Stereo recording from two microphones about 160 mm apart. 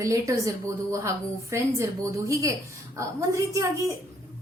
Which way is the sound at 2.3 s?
20° right (ahead or behind).